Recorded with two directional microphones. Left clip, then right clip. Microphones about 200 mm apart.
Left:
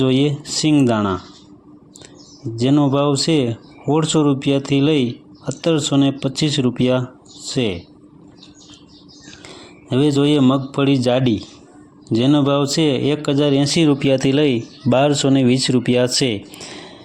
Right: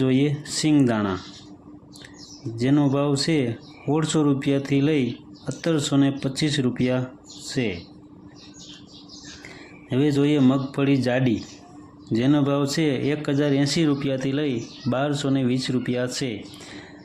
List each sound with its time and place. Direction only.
0.0 s speech: 25° left (ahead or behind)
2.6 s speech: 20° left (ahead or behind)
9.5 s speech: 25° left (ahead or behind)